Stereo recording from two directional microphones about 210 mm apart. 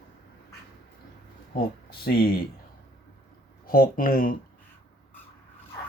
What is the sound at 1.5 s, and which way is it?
Speech, 45° left (ahead or behind).